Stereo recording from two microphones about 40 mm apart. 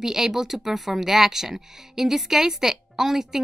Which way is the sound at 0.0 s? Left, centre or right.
Centre.